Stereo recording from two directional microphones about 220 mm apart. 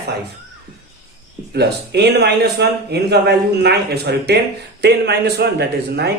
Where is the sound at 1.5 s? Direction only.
50° right (ahead or behind).